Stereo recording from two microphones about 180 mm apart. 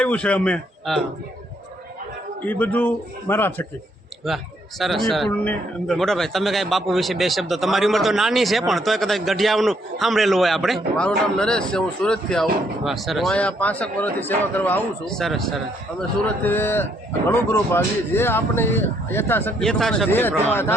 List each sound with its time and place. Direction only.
0.0 s a man's voice: 5° left (ahead or behind)
2.4 s a man's voice: 10° left (ahead or behind)
4.8 s a man's voice: centre (ahead or behind)